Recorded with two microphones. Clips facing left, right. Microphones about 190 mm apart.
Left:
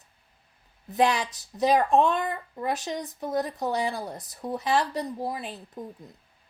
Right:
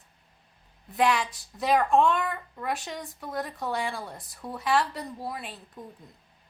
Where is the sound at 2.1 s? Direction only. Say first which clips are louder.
Left 1 dB; 30° left (ahead or behind).